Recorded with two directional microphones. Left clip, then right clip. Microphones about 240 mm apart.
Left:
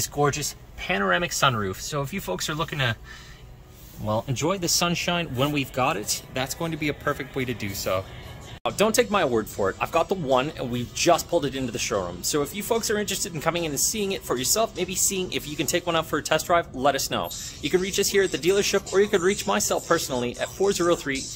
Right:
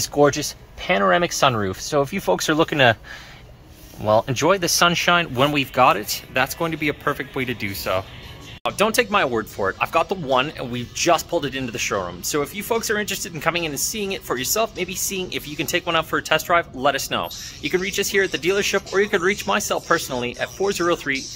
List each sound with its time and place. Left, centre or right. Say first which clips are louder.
0.0 s speech: right 7 dB; right
4.1 s speech: right 9 dB; centre